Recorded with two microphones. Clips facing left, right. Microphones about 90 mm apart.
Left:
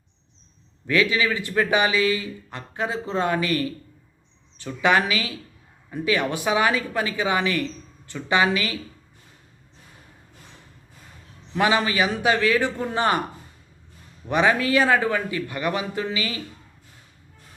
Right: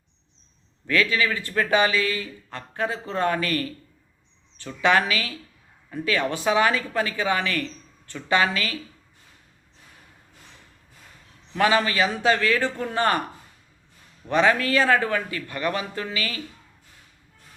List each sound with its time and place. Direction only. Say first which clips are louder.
0.9 s a man's voice: left 1 dB; 15° left (ahead or behind)
11.5 s a man's voice: even; 15° left (ahead or behind)
14.3 s a man's voice: even; 15° left (ahead or behind)